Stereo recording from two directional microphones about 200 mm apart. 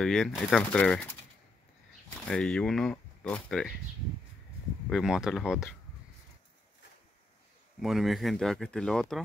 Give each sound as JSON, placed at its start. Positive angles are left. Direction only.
{"t": 0.0, "sound": "speech", "side_deg": 0}
{"t": 2.2, "sound": "speech", "side_deg": 5}
{"t": 4.8, "sound": "speech", "side_deg": 0}
{"t": 7.8, "sound": "speech", "side_deg": 0}